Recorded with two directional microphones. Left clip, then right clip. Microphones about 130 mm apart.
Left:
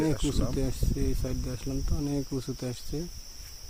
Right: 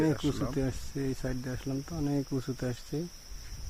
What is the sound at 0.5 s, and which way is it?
Speech, 5° left (ahead or behind).